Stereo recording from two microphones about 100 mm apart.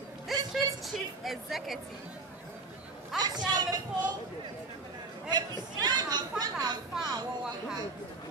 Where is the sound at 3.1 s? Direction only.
45° right (ahead or behind).